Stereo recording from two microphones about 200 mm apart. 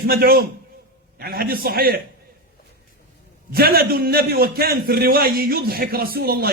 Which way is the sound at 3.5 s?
50° right (ahead or behind).